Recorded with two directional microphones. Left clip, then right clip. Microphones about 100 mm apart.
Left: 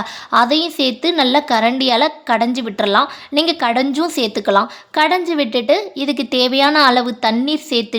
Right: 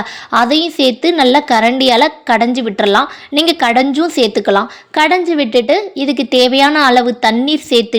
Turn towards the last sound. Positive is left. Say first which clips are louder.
# right 6 dB
turn(degrees=-25)  # may be behind; listen again after turning